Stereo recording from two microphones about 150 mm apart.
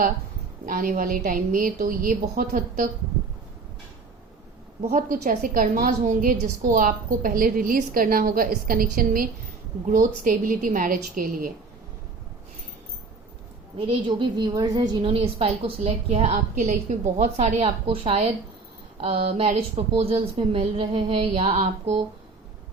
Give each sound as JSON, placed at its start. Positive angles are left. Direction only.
{"t": 0.6, "sound": "a woman's voice", "side_deg": -65}
{"t": 4.8, "sound": "a woman's voice", "side_deg": -55}
{"t": 9.8, "sound": "a woman's voice", "side_deg": -60}
{"t": 13.7, "sound": "a woman's voice", "side_deg": -35}
{"t": 15.1, "sound": "a woman's voice", "side_deg": -40}